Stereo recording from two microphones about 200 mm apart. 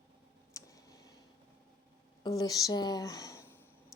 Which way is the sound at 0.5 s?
15° left (ahead or behind).